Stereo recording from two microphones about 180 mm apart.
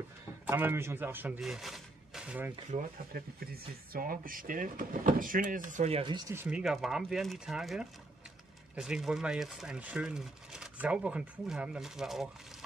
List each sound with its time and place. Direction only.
0.5 s speech: 10° right (ahead or behind)
2.7 s speech: 50° right (ahead or behind); by 6.6 s 10° right (ahead or behind)
6.6 s speech: centre (ahead or behind)